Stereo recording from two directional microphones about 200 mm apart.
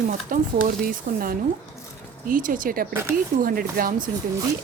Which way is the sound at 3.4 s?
45° right (ahead or behind).